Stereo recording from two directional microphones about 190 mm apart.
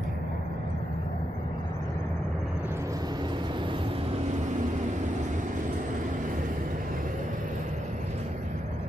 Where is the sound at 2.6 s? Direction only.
15° right (ahead or behind).